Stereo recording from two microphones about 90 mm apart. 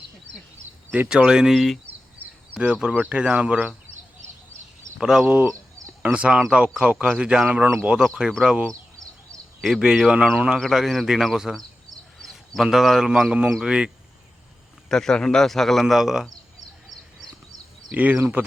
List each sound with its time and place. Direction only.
0.9 s speech: 10° right (ahead or behind)
2.6 s speech: 10° right (ahead or behind)
4.9 s speech: 5° right (ahead or behind)
5.2 s a man's voice: 20° right (ahead or behind)
14.8 s a man's voice: 5° left (ahead or behind)
17.9 s speech: 20° right (ahead or behind)